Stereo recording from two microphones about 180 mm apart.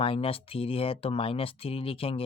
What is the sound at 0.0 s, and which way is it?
Speech, 30° left (ahead or behind).